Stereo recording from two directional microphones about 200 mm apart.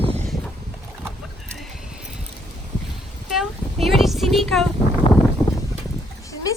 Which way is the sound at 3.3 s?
Centre (ahead or behind).